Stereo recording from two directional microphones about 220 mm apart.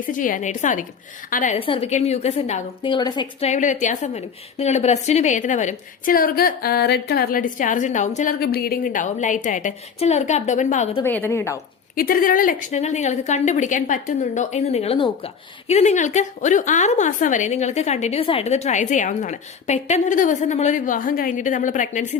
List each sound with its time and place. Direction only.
0.0 s a woman's voice: 35° left (ahead or behind)
1.5 s a woman's voice: 25° left (ahead or behind)
3.4 s a woman's voice: 35° left (ahead or behind)
11.0 s a woman's voice: 10° left (ahead or behind)
11.9 s a woman's voice: 40° left (ahead or behind)